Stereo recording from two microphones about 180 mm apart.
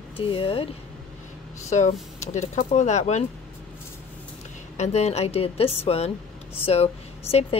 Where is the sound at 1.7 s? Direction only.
40° left (ahead or behind).